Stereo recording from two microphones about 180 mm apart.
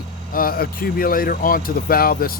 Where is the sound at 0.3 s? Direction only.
55° left (ahead or behind).